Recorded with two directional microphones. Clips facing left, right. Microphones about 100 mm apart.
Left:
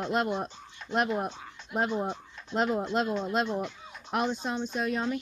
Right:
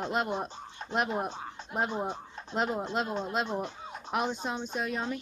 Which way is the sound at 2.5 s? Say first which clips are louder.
Left 3 dB; 10° right (ahead or behind).